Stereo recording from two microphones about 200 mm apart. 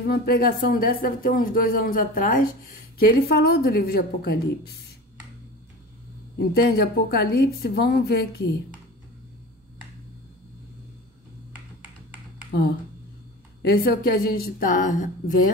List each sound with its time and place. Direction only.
0.1 s speech: 50° left (ahead or behind)
6.5 s speech: 50° left (ahead or behind)
13.7 s speech: 50° left (ahead or behind)